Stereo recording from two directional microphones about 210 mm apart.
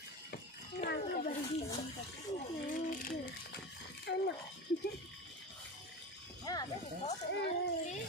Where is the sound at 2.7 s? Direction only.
40° left (ahead or behind).